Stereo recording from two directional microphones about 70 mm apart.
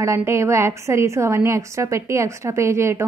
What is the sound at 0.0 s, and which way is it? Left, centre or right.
A woman's voice, right.